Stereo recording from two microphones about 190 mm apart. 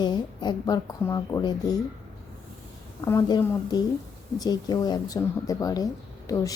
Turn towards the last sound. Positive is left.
turn(degrees=15)  # may be behind; listen again after turning